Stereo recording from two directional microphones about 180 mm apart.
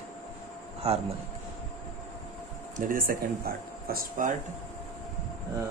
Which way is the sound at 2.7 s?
50° right (ahead or behind).